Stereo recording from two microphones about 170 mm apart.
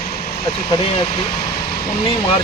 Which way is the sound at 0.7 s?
30° left (ahead or behind).